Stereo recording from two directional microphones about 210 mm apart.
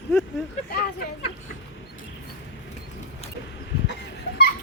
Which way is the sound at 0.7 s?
50° left (ahead or behind).